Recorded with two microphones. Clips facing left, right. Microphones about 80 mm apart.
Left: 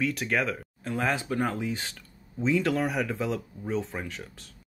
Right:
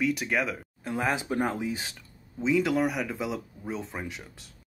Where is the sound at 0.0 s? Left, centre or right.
Centre.